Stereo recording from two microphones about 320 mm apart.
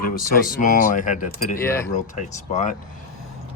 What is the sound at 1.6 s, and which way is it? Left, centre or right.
Speech, centre.